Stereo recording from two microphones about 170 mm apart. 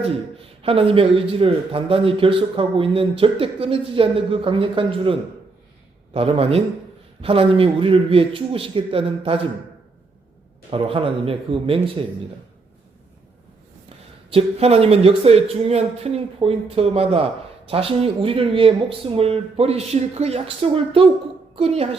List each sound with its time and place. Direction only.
0.6 s speech: 35° right (ahead or behind)
6.1 s speech: 35° right (ahead or behind)
10.7 s speech: 30° right (ahead or behind)
14.3 s a woman's voice: 35° right (ahead or behind)